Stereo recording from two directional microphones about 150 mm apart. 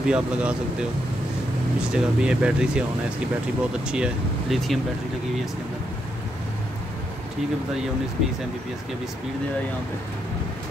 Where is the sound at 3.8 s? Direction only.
5° right (ahead or behind).